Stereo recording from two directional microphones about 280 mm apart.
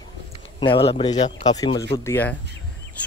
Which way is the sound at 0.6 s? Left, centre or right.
Centre.